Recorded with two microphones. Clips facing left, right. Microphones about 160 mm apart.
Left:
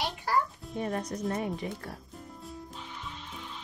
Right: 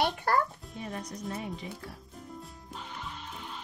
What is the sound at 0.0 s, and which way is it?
Music, 55° right (ahead or behind).